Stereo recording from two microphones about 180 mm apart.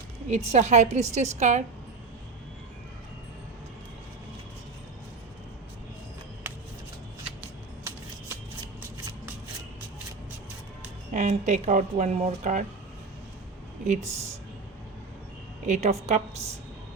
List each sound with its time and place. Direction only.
0.3 s speech: 40° right (ahead or behind)
11.1 s speech: 40° right (ahead or behind)
13.8 s speech: 40° right (ahead or behind)
15.6 s speech: 40° right (ahead or behind)